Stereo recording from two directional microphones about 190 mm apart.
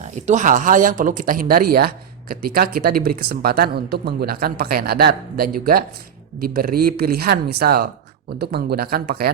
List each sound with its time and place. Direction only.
0.0 s speech: 40° right (ahead or behind)